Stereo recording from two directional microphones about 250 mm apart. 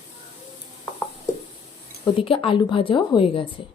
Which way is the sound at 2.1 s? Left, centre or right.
Left.